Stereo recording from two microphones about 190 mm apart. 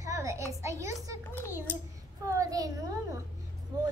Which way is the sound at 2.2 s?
15° right (ahead or behind).